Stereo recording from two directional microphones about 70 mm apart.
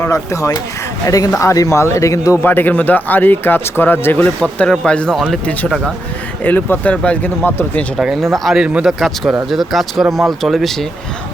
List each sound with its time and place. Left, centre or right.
0.0 s speech: left
1.0 s a man's voice: left
2.4 s speech: left
4.4 s speech: centre
6.4 s speech: left
7.9 s speech: centre
8.5 s speech: centre
8.9 s speech: centre